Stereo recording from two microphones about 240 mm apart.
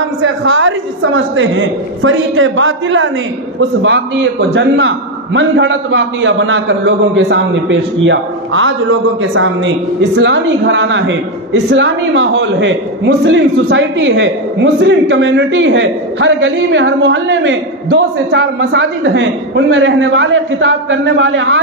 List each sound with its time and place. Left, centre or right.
0.2 s a woman's voice: right